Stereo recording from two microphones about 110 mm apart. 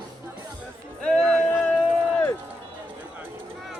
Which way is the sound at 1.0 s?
5° left (ahead or behind).